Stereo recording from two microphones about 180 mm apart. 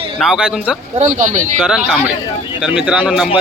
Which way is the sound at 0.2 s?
5° right (ahead or behind).